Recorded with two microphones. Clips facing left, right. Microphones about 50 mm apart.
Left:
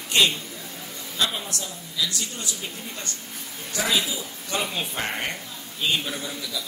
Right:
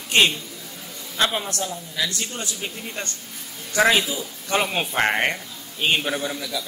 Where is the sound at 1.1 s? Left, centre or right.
Right.